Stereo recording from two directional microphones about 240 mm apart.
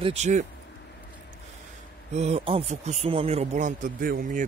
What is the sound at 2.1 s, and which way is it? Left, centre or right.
Speech, right.